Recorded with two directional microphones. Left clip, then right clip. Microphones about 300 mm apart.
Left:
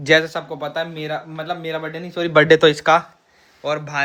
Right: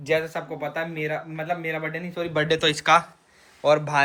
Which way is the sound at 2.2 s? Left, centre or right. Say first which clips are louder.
Left 11 dB; left.